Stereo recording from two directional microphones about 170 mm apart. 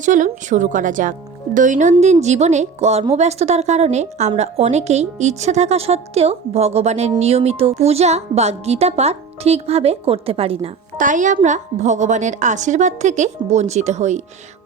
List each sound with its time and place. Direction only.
0.0 s a woman's voice: 50° right (ahead or behind)
10.9 s a woman's voice: 50° right (ahead or behind)